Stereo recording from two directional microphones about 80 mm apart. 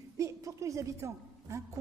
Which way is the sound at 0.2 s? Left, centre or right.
Right.